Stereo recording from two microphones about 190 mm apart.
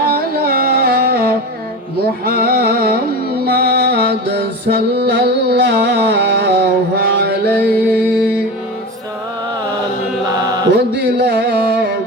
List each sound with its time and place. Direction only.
0.1 s music: 50° right (ahead or behind)
10.2 s mantra: 20° right (ahead or behind)
10.7 s music: 60° right (ahead or behind)